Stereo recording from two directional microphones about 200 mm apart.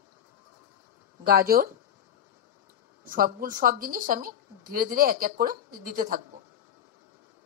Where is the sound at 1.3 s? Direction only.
50° right (ahead or behind).